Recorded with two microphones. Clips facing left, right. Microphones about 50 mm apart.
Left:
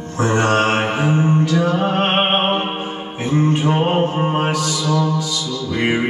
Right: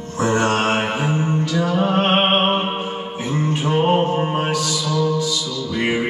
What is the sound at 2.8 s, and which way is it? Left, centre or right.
Music, left.